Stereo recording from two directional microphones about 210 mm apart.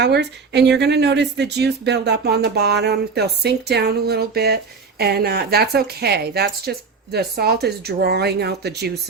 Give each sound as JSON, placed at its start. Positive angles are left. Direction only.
{"t": 0.0, "sound": "speech", "side_deg": -55}